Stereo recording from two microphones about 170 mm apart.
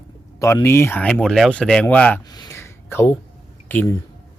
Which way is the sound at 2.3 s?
20° left (ahead or behind).